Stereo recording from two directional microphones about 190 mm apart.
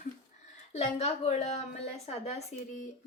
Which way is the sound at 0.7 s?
35° left (ahead or behind).